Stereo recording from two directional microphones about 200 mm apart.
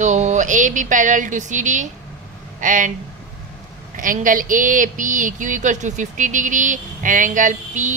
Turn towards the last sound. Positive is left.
turn(degrees=-40)  # may be behind; listen again after turning